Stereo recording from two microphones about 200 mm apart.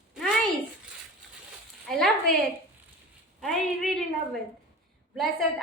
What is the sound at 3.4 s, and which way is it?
Speech, centre (ahead or behind).